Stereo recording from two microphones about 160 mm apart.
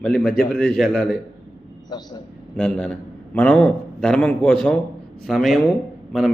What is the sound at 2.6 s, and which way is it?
A man's voice, 5° left (ahead or behind).